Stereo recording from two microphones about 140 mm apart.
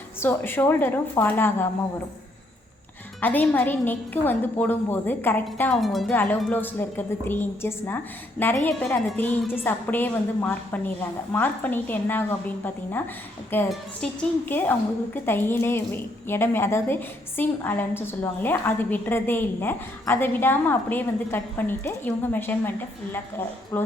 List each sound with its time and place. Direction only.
0.2 s a woman's voice: 15° left (ahead or behind)
3.2 s a woman's voice: 15° left (ahead or behind)
5.7 s a woman's voice: centre (ahead or behind)
6.4 s a woman's voice: 15° left (ahead or behind)
9.1 s a woman's voice: 15° left (ahead or behind)
23.7 s a woman's voice: 15° left (ahead or behind)